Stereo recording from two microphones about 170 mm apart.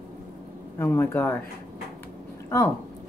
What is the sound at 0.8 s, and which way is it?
Speech, 10° left (ahead or behind).